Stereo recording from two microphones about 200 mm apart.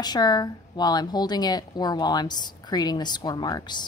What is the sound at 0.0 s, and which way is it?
A woman's voice, 20° left (ahead or behind).